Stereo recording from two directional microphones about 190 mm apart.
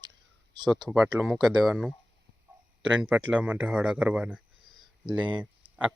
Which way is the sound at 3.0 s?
5° right (ahead or behind).